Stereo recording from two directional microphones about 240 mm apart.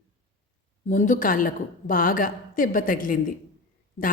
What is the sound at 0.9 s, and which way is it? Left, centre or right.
A woman's voice, left.